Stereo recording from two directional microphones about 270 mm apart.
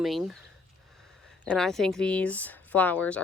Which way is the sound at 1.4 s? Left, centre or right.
Centre.